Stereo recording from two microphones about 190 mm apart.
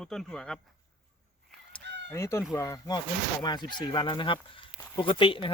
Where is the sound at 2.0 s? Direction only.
15° left (ahead or behind).